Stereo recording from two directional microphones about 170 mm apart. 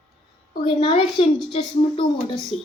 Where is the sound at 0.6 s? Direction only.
30° left (ahead or behind).